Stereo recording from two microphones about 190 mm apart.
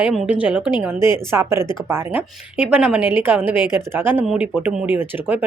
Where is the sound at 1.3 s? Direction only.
15° right (ahead or behind).